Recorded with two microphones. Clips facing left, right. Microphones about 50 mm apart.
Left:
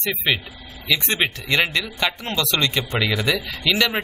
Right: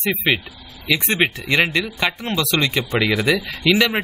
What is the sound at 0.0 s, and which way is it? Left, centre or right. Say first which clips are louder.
Speech: right 3 dB; centre.